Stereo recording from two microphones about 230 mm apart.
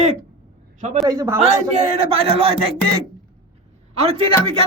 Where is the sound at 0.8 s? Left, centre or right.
Right.